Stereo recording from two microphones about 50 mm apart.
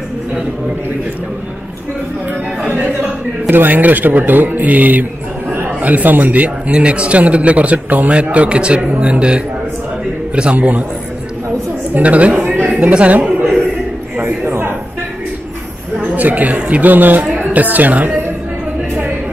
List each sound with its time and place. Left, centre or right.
3.4 s a man's voice: right
11.9 s a woman's voice: right
14.2 s a sound: right
16.0 s a woman's voice: right